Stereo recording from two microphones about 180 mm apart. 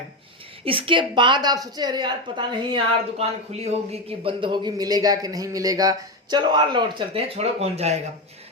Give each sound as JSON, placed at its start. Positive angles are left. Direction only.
{"t": 0.6, "sound": "speech", "side_deg": -30}